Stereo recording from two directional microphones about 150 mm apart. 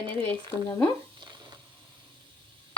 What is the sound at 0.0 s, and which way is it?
Speech, 35° right (ahead or behind).